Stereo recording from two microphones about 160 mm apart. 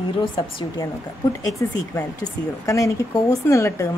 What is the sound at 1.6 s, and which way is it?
Speech, 20° left (ahead or behind).